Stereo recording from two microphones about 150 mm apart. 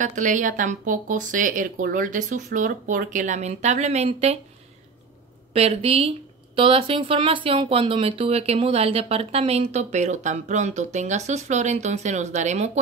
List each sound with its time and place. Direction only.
0.0 s speech: 55° right (ahead or behind)
5.5 s speech: 45° right (ahead or behind)